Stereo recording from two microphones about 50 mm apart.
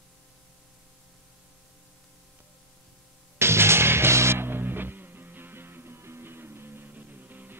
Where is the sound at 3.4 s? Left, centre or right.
Right.